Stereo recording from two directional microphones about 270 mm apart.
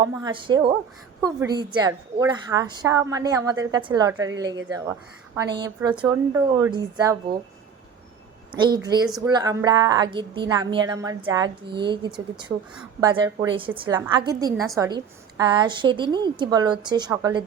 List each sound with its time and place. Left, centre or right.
0.1 s a woman's voice: centre
5.3 s a woman's voice: centre
8.5 s a woman's voice: centre